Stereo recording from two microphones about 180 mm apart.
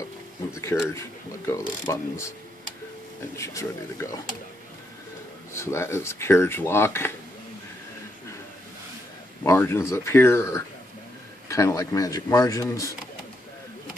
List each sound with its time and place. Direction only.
0.7 s speech: 15° left (ahead or behind)
3.3 s speech: 15° left (ahead or behind)
5.5 s speech: 15° left (ahead or behind)
9.4 s speech: 15° left (ahead or behind)